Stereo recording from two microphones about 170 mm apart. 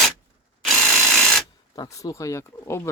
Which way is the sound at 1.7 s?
20° left (ahead or behind).